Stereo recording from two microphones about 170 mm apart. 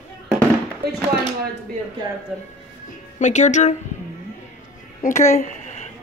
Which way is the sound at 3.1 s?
45° left (ahead or behind).